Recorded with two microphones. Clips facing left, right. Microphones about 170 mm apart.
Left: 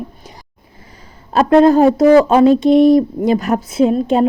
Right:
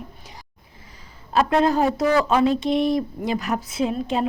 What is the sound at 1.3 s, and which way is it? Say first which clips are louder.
A woman's voice: left 9 dB; 45° left (ahead or behind).